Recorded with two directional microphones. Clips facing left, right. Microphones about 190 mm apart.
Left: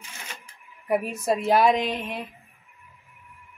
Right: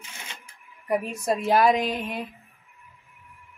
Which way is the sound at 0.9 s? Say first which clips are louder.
Left 1 dB; 5° left (ahead or behind).